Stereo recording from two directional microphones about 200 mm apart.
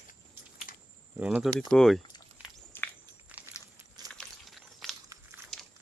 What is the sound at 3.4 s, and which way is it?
Biting, 5° right (ahead or behind).